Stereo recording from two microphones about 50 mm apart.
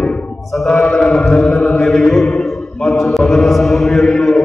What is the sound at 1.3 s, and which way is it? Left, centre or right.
Chant, centre.